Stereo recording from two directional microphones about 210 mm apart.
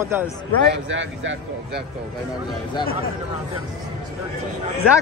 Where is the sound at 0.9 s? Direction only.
65° right (ahead or behind).